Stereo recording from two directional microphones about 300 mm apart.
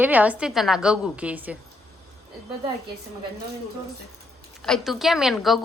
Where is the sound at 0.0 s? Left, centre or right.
Centre.